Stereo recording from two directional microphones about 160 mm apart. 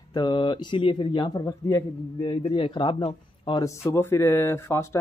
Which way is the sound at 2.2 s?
35° left (ahead or behind).